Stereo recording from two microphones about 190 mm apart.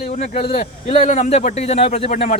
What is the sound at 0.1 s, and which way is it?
Speech, 35° left (ahead or behind).